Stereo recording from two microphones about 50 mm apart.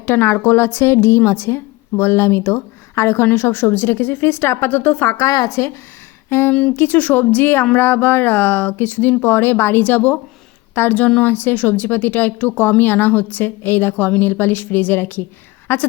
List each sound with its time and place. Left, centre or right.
0.0 s a woman's voice: left
3.2 s speech: left
4.8 s a woman's voice: left
5.1 s a woman's voice: left
6.5 s a woman's voice: centre
6.7 s speech: left
9.8 s a woman's voice: left